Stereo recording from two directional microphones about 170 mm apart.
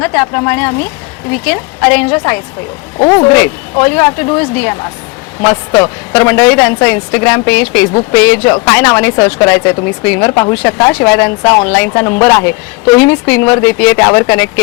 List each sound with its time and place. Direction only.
0.0 s speech: 10° left (ahead or behind)